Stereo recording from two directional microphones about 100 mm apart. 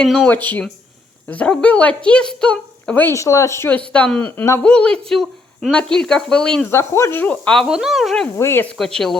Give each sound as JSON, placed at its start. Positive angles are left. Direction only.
{"t": 0.0, "sound": "speech", "side_deg": 5}
{"t": 1.3, "sound": "speech", "side_deg": 10}
{"t": 3.2, "sound": "speech", "side_deg": 30}
{"t": 3.7, "sound": "speech", "side_deg": 15}
{"t": 4.6, "sound": "speech", "side_deg": 10}
{"t": 6.7, "sound": "speech", "side_deg": 25}
{"t": 8.4, "sound": "speech", "side_deg": 25}
{"t": 8.8, "sound": "speech", "side_deg": 5}